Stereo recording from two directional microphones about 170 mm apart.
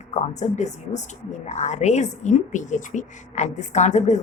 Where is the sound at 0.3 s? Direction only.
45° left (ahead or behind).